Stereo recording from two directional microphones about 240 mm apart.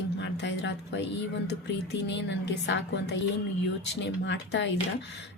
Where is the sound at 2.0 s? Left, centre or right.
Left.